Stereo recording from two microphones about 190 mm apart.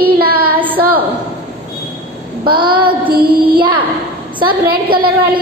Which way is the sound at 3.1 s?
50° right (ahead or behind).